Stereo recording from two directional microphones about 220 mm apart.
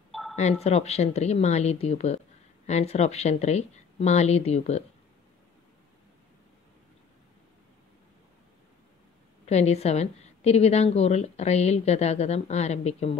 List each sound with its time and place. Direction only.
0.1 s a sound: centre (ahead or behind)
0.4 s speech: 30° left (ahead or behind)
9.5 s speech: 30° left (ahead or behind)